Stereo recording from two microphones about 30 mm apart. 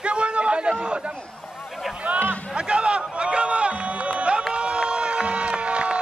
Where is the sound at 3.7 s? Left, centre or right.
Right.